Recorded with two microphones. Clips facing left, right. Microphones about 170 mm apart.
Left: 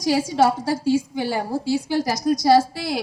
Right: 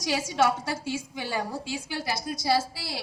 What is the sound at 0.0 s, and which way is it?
A woman's voice, 30° left (ahead or behind).